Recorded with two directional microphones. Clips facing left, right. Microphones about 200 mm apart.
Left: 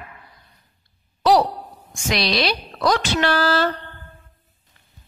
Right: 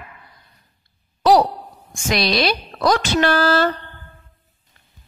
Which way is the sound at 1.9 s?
50° right (ahead or behind).